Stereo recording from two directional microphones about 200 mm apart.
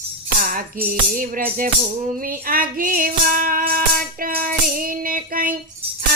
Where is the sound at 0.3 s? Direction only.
45° right (ahead or behind).